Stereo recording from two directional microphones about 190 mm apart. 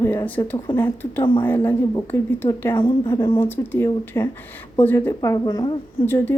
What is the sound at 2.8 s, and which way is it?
Speech, 25° left (ahead or behind).